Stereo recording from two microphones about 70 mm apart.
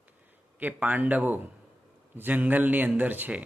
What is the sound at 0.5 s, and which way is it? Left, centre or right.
A man's voice, right.